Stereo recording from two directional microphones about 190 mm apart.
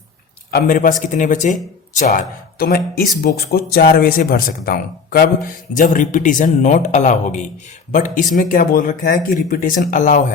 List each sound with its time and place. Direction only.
0.5 s a man's voice: 45° left (ahead or behind)